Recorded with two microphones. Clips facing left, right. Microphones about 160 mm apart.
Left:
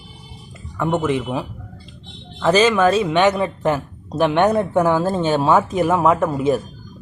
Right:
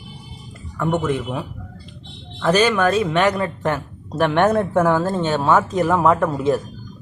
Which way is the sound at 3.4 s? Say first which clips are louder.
Left 2 dB; 5° left (ahead or behind).